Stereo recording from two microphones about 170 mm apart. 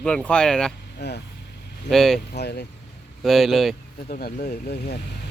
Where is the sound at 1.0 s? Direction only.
80° left.